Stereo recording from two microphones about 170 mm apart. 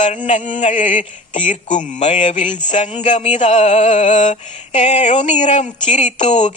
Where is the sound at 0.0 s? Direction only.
45° left (ahead or behind).